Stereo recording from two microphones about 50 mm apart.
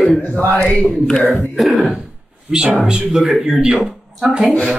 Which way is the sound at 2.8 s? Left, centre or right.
Centre.